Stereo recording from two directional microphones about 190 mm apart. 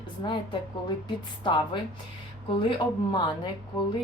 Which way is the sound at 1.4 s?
25° left (ahead or behind).